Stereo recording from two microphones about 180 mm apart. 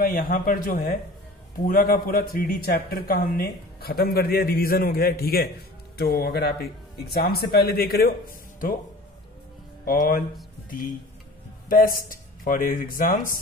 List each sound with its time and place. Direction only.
0.0 s a man's voice: 50° left (ahead or behind)
9.8 s speech: 50° left (ahead or behind)
11.7 s speech: 50° left (ahead or behind)